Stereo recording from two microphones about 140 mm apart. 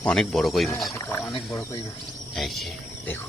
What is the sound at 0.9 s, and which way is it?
Speech, 20° left (ahead or behind).